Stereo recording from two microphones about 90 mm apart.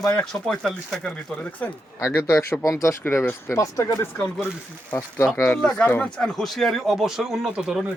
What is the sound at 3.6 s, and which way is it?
Speech, 40° left (ahead or behind).